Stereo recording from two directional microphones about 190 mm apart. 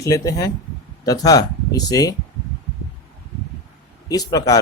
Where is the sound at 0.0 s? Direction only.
15° left (ahead or behind).